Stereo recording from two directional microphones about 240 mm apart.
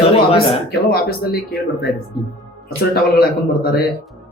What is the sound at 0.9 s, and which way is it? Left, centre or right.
Speech, left.